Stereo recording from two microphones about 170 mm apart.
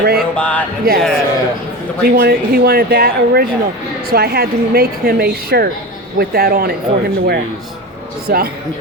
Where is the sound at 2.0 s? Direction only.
65° right (ahead or behind).